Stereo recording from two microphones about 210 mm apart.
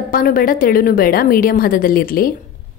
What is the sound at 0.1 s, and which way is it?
A woman's voice, 40° left (ahead or behind).